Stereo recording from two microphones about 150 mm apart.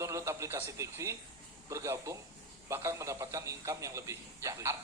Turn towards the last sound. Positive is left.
turn(degrees=-20)  # may be behind; listen again after turning